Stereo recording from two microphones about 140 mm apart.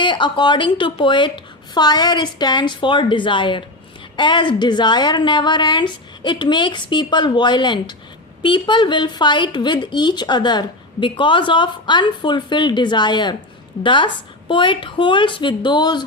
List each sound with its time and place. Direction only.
0.0 s speech: 35° left (ahead or behind)